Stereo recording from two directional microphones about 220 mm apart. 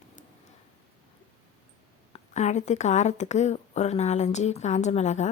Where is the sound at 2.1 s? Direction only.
30° left (ahead or behind).